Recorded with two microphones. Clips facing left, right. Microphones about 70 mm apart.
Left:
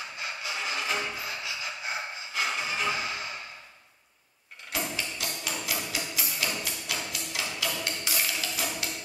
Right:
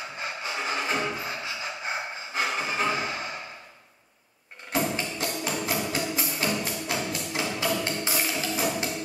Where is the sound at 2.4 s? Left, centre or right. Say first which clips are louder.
Right 3 dB; right.